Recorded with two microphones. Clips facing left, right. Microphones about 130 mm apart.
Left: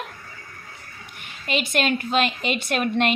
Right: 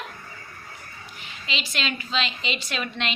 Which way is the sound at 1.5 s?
50° left (ahead or behind).